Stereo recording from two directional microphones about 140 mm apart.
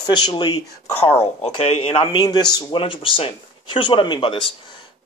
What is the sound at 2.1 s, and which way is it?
Speech, 30° left (ahead or behind).